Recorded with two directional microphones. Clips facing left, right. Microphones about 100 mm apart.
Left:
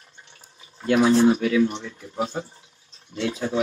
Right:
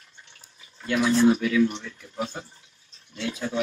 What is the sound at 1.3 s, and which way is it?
Speech, 30° left (ahead or behind).